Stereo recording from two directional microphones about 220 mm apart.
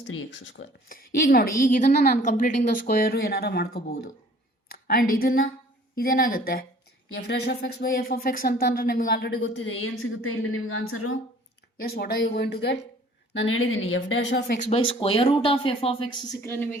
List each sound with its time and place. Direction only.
0.0 s speech: 60° left (ahead or behind)
0.9 s speech: 45° left (ahead or behind)
10.0 s a woman's voice: 70° left (ahead or behind)
11.8 s speech: 45° left (ahead or behind)
14.7 s speech: 25° left (ahead or behind)